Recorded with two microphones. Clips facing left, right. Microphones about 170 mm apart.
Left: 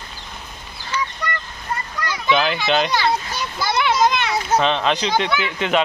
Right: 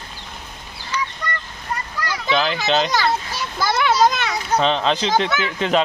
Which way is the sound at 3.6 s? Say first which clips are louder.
Right 1 dB; 45° right (ahead or behind).